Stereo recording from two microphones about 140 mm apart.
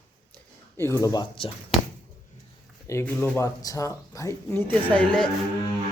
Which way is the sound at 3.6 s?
25° left (ahead or behind).